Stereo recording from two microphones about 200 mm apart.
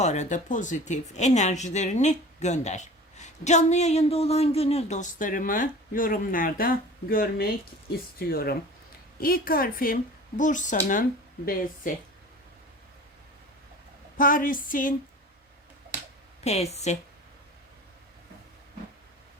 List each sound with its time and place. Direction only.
0.0 s a woman's voice: 35° left (ahead or behind)
14.2 s a woman's voice: 45° left (ahead or behind)
16.4 s speech: 35° left (ahead or behind)